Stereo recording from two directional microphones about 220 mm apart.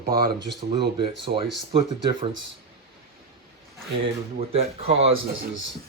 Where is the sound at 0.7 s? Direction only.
20° right (ahead or behind).